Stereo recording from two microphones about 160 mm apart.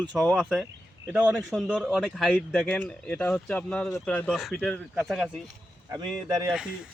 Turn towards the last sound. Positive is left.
turn(degrees=-5)  # may be behind; listen again after turning